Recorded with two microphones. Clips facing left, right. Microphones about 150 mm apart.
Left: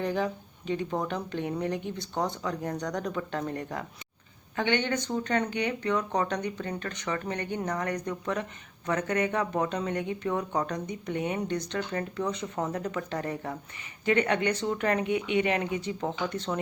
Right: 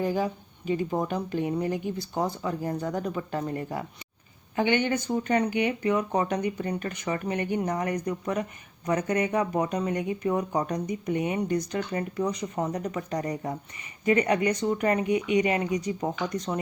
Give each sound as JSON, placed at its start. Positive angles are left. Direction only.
{"t": 0.0, "sound": "speech", "side_deg": -5}
{"t": 7.9, "sound": "speech", "side_deg": -5}